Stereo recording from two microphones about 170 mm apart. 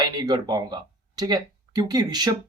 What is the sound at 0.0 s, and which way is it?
Speech, 25° right (ahead or behind).